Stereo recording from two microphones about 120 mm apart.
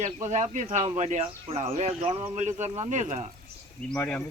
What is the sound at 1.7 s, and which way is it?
Speech, 65° right (ahead or behind).